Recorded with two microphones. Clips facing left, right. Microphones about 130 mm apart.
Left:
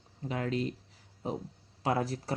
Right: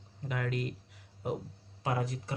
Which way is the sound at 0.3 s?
30° left (ahead or behind).